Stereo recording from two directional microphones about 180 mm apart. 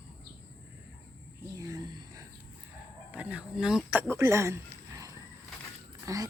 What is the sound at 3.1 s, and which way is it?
A woman's voice, 10° right (ahead or behind).